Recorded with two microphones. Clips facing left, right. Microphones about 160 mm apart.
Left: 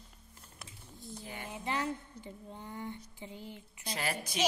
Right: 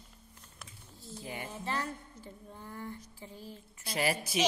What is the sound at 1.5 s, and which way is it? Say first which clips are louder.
Speech: left 3 dB; 15° left (ahead or behind).